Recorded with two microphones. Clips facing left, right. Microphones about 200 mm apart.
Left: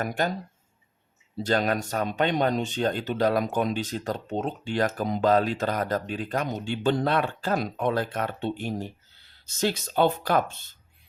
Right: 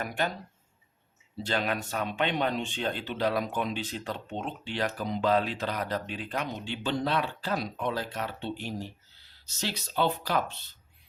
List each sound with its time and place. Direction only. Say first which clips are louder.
0.0 s speech: left 4 dB; 40° left (ahead or behind)
1.4 s speech: left 6 dB; 40° left (ahead or behind)